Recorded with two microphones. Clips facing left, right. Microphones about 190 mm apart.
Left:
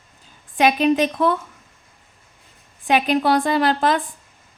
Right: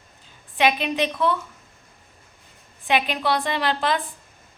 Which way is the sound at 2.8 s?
45° left (ahead or behind).